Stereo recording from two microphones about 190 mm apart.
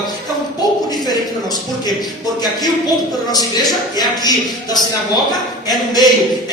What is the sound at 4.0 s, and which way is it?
Speech, 20° left (ahead or behind).